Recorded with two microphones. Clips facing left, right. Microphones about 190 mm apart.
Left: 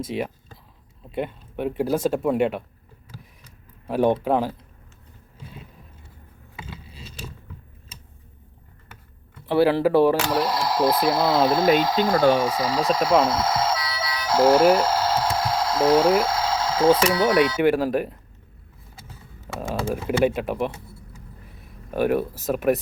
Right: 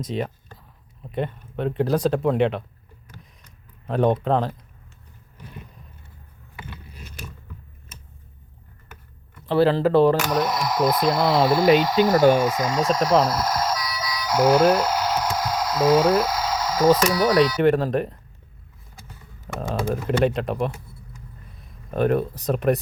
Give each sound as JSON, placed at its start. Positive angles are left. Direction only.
{"t": 0.0, "sound": "speech", "side_deg": 10}
{"t": 3.8, "sound": "speech", "side_deg": 10}
{"t": 9.5, "sound": "speech", "side_deg": 10}
{"t": 10.2, "sound": "speech", "side_deg": 30}
{"t": 12.0, "sound": "speech", "side_deg": 30}
{"t": 17.6, "sound": "speech", "side_deg": 10}
{"t": 19.5, "sound": "speech", "side_deg": 5}
{"t": 21.8, "sound": "speech", "side_deg": 5}